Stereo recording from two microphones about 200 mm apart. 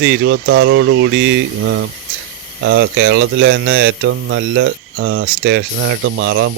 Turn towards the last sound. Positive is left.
turn(degrees=-75)  # may be behind; listen again after turning